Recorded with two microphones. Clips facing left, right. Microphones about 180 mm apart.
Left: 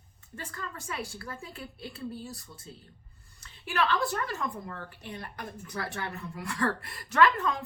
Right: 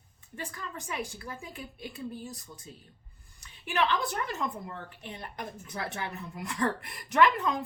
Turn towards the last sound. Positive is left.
turn(degrees=-20)  # may be behind; listen again after turning